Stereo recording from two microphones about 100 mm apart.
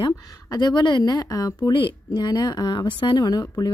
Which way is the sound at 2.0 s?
45° left (ahead or behind).